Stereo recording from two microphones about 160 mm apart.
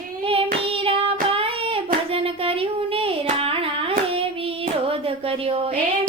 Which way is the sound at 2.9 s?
35° right (ahead or behind).